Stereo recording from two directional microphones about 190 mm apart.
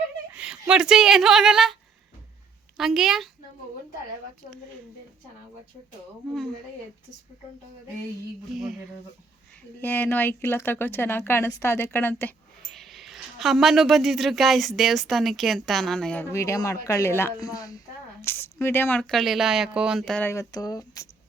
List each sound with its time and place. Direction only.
0.3 s speech: 5° right (ahead or behind)
2.7 s speech: centre (ahead or behind)
9.8 s speech: 10° left (ahead or behind)
12.7 s speech: centre (ahead or behind)
16.3 s speech: 15° left (ahead or behind)
20.3 s speech: 15° left (ahead or behind)